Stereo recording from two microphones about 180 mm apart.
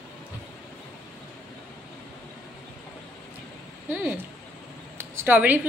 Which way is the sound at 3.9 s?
10° right (ahead or behind).